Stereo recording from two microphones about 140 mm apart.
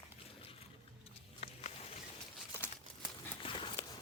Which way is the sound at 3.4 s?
40° left (ahead or behind).